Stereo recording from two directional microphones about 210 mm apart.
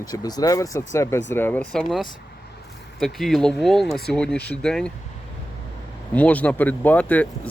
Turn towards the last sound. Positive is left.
turn(degrees=5)  # may be behind; listen again after turning